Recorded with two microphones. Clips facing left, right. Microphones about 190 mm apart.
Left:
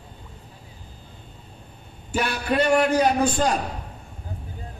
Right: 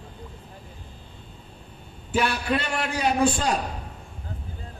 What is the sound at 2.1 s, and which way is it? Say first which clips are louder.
A man's voice: left 2 dB; 45° left (ahead or behind).